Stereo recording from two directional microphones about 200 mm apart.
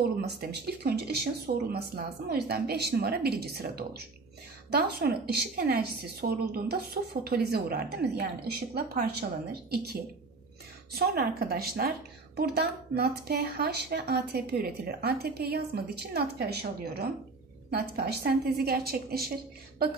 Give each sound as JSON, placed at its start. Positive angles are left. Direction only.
{"t": 0.2, "sound": "speech", "side_deg": -55}
{"t": 10.9, "sound": "speech", "side_deg": -50}